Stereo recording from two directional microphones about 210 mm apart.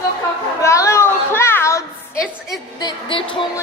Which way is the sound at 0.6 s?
15° left (ahead or behind).